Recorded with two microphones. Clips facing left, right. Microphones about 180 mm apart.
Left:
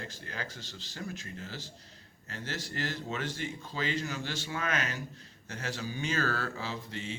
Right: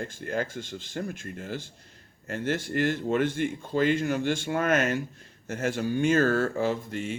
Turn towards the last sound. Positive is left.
turn(degrees=-50)  # may be behind; listen again after turning